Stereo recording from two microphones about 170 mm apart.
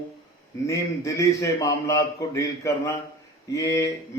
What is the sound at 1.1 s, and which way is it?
A man's voice, 20° left (ahead or behind).